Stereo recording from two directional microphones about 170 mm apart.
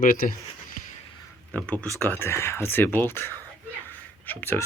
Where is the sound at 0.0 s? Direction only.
55° left (ahead or behind).